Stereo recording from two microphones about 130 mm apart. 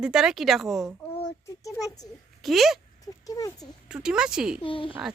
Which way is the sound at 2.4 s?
Centre (ahead or behind).